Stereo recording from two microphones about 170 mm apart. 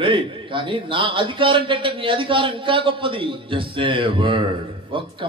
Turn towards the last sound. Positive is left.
turn(degrees=-30)  # may be behind; listen again after turning